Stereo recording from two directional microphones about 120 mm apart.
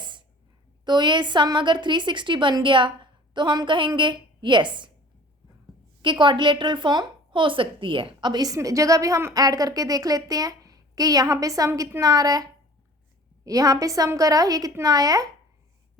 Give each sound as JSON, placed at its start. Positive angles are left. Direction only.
{"t": 0.0, "sound": "a sound", "side_deg": -40}
{"t": 0.9, "sound": "a woman's voice", "side_deg": -40}
{"t": 6.0, "sound": "a woman's voice", "side_deg": -40}